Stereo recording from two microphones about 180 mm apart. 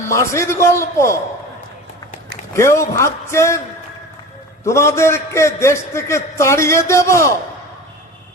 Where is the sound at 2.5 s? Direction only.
15° left (ahead or behind).